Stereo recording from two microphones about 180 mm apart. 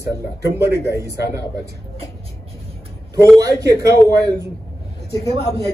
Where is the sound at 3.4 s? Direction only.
20° right (ahead or behind).